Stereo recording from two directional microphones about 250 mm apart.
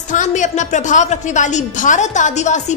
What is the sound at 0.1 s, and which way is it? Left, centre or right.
A woman's voice, left.